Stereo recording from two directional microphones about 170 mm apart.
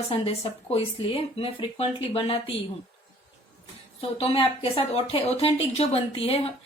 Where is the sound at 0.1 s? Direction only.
35° left (ahead or behind).